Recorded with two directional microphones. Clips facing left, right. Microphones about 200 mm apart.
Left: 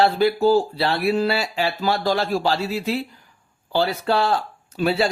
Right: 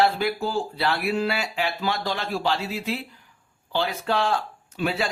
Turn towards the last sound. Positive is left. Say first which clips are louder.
# left 6 dB
turn(degrees=35)  # may be behind; listen again after turning